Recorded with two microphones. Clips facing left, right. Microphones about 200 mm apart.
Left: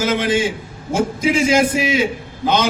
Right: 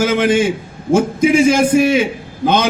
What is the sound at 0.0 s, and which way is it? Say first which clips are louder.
A man's voice: right 4 dB; 55° right (ahead or behind).